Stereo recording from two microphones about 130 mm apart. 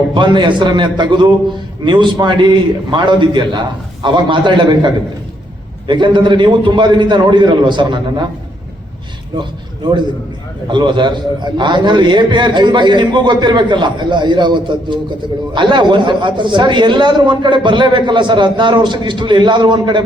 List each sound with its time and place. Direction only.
0.1 s speech: 40° right (ahead or behind)
5.9 s speech: 40° right (ahead or behind)
9.4 s a man's voice: 35° right (ahead or behind)